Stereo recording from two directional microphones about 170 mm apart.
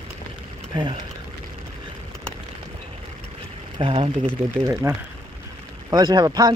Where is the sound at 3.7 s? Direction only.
35° right (ahead or behind).